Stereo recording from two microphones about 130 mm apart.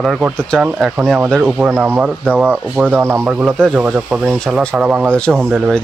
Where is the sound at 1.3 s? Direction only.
10° right (ahead or behind).